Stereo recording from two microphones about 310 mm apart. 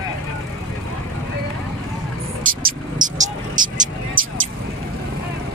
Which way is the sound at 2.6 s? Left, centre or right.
Right.